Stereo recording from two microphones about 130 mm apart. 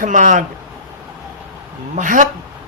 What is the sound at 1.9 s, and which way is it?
Speech, 80° right.